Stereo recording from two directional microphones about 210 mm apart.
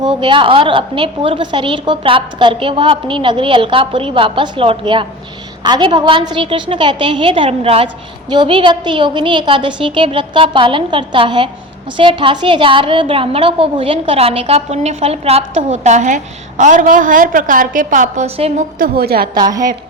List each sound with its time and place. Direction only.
0.0 s a woman's voice: 20° right (ahead or behind)
18.9 s a woman's voice: 50° right (ahead or behind)
19.4 s a woman's voice: 15° right (ahead or behind)